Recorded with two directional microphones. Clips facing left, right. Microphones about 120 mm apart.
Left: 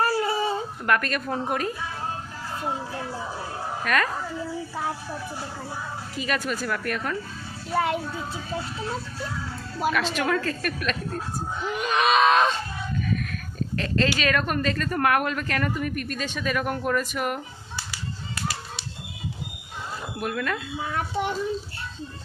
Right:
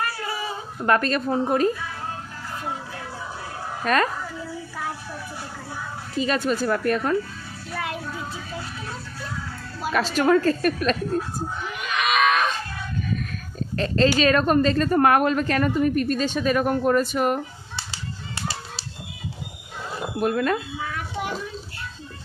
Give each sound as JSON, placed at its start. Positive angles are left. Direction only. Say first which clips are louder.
{"t": 0.0, "sound": "a sound", "louder": "left 5 dB", "side_deg": 30}
{"t": 0.9, "sound": "speech", "louder": "right 4 dB", "side_deg": -30}
{"t": 3.8, "sound": "speech", "louder": "right 4 dB", "side_deg": -30}
{"t": 6.1, "sound": "speech", "louder": "right 6 dB", "side_deg": -30}
{"t": 7.7, "sound": "speech", "louder": "left 6 dB", "side_deg": 30}
{"t": 9.9, "sound": "speech", "louder": "right 8 dB", "side_deg": -35}
{"t": 11.8, "sound": "screaming", "louder": "left 2 dB", "side_deg": 35}
{"t": 13.7, "sound": "speech", "louder": "right 5 dB", "side_deg": -35}
{"t": 20.1, "sound": "speech", "louder": "right 7 dB", "side_deg": -35}
{"t": 20.9, "sound": "a sound", "louder": "left 5 dB", "side_deg": 30}